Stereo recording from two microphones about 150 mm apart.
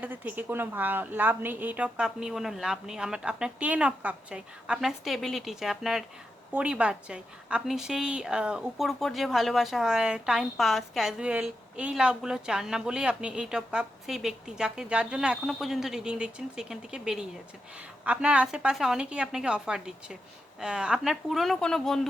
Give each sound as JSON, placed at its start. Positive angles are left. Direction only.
{"t": 0.0, "sound": "a woman's voice", "side_deg": -10}